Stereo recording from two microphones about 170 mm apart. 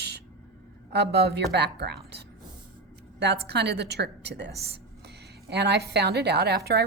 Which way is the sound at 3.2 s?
80° right.